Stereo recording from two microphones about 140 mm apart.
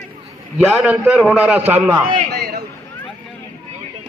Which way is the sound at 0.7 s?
10° right (ahead or behind).